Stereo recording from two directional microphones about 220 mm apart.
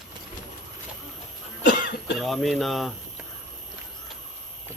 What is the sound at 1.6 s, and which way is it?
Cough, 50° left (ahead or behind).